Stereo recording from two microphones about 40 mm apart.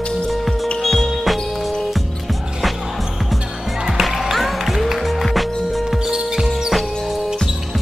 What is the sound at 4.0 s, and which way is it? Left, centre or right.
Music, centre.